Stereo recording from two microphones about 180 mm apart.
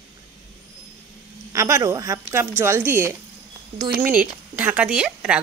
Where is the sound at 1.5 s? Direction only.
15° right (ahead or behind).